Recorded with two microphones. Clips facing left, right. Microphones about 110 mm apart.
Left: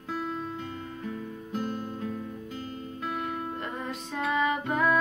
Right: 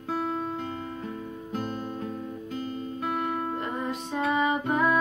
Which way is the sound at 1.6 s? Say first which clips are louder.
Even; 25° right (ahead or behind).